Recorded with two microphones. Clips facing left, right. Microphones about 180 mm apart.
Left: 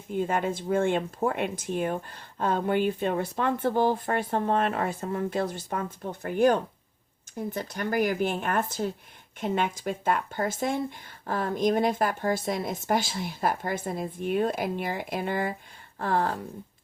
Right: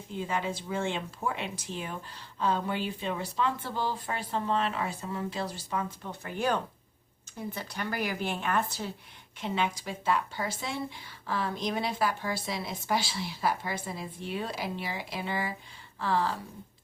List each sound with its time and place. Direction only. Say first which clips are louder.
0.1 s speech: left 6 dB; 50° left (ahead or behind)